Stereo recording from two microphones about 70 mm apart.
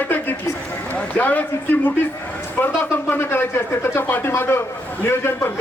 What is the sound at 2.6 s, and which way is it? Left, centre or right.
Speech, left.